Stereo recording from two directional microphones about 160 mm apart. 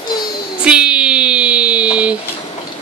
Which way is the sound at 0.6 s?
5° right (ahead or behind).